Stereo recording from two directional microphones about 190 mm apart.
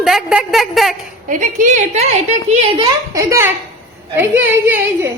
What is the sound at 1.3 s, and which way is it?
A woman's voice, 40° right (ahead or behind).